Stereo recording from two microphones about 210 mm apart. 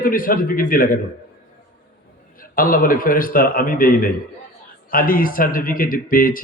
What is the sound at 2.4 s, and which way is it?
Speech, 40° left (ahead or behind).